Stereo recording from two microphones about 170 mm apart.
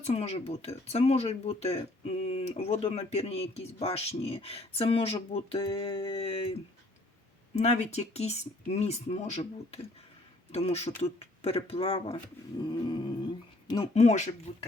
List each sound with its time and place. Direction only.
0.0 s speech: 40° left (ahead or behind)
12.1 s a sound: 25° left (ahead or behind)
13.9 s speech: 40° left (ahead or behind)